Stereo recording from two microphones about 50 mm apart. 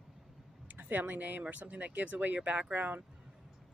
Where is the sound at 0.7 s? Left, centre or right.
Right.